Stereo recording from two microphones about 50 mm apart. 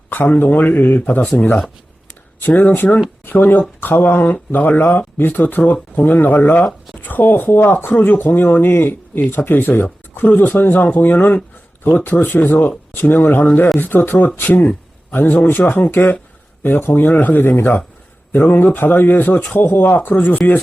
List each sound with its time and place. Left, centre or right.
0.1 s speech: left
2.4 s speech: left
9.8 s speech: left